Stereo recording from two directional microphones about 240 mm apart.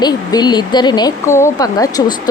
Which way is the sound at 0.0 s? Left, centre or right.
Centre.